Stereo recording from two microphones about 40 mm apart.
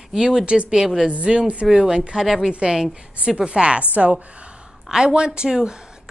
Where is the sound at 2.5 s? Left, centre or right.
Right.